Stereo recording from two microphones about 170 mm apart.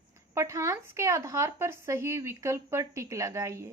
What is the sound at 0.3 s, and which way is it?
Speech, 15° right (ahead or behind).